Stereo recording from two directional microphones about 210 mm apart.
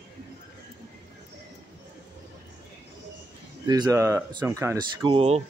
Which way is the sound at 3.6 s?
20° right (ahead or behind).